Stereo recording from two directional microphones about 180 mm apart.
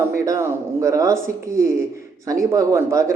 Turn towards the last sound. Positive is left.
turn(degrees=-15)  # may be behind; listen again after turning